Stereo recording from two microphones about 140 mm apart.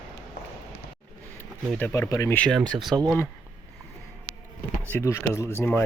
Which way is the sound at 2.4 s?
5° left (ahead or behind).